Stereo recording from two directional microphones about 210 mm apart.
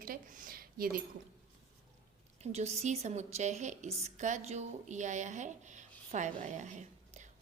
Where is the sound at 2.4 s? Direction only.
30° right (ahead or behind).